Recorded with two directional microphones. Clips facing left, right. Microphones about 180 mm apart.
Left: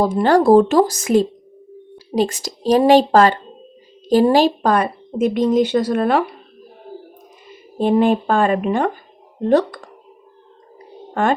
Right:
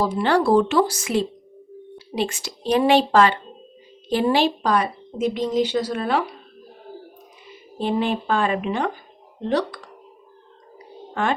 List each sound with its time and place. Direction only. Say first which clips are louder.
0.0 s a woman's voice: left 5 dB; 45° left (ahead or behind)
7.4 s speech: left 7 dB; 50° left (ahead or behind)
11.1 s speech: left 5 dB; 45° left (ahead or behind)